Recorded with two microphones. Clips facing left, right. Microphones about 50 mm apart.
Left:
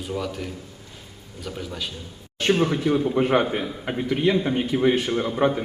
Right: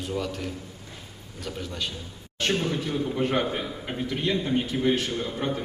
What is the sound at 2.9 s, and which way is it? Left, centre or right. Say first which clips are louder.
A man's voice: left 5 dB; left.